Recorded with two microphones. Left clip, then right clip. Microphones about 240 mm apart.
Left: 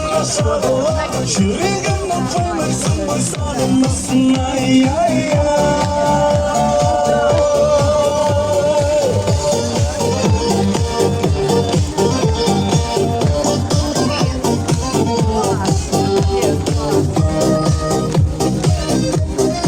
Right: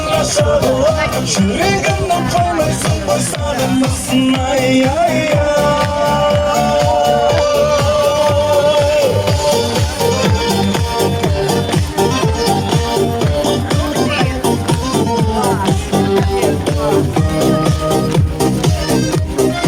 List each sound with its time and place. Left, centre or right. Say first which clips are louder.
0.2 s music: right 4 dB; right
4.1 s music: right 3 dB; right
14.9 s music: even; right
17.6 s music: right 3 dB; right